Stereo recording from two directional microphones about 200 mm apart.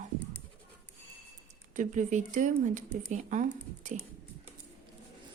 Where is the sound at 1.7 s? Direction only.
40° right (ahead or behind).